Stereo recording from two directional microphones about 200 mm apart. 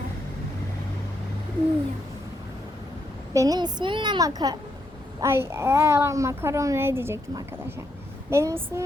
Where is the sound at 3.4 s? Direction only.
20° right (ahead or behind).